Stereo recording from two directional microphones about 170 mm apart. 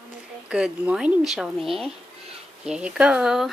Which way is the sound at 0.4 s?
5° right (ahead or behind).